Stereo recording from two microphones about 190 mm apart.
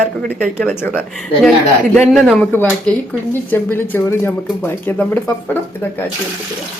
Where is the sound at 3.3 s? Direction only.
10° left (ahead or behind).